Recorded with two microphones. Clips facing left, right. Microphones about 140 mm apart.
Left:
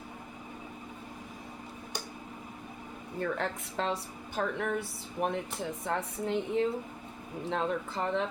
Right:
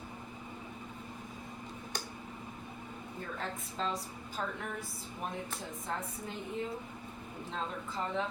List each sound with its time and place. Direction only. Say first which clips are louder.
3.2 s speech: left 8 dB; 75° left (ahead or behind)